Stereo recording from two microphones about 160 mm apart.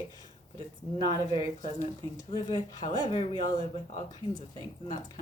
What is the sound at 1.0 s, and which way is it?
Speech, 25° left (ahead or behind).